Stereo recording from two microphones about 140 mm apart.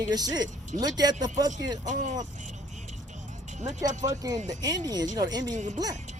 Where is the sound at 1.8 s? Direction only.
60° right (ahead or behind).